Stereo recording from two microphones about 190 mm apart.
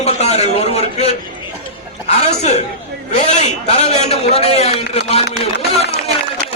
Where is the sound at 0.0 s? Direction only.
35° left (ahead or behind).